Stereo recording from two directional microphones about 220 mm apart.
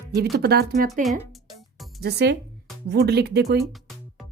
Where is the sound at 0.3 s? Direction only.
45° right (ahead or behind).